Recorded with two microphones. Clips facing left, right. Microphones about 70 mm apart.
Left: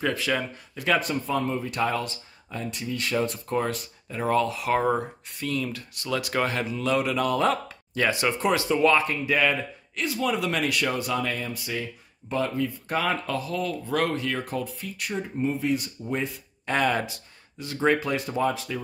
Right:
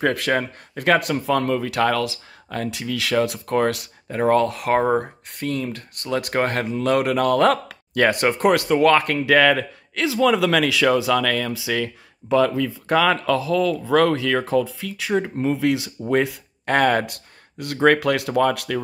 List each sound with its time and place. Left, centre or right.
0.0 s speech: right
0.9 s speech: right
14.8 s speech: right
16.6 s speech: right
17.8 s speech: right